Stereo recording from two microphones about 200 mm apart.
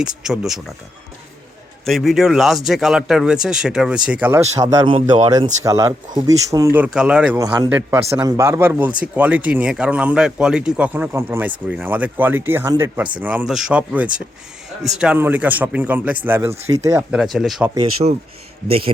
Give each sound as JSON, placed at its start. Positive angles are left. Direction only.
{"t": 0.0, "sound": "speech", "side_deg": -5}
{"t": 1.8, "sound": "speech", "side_deg": 0}
{"t": 4.6, "sound": "speech", "side_deg": -25}
{"t": 7.3, "sound": "speech", "side_deg": -15}
{"t": 18.0, "sound": "speech", "side_deg": -30}